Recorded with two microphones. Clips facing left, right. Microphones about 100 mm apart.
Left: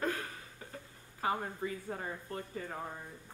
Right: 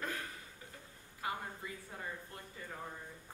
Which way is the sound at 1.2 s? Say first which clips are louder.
Left 7 dB; 45° left (ahead or behind).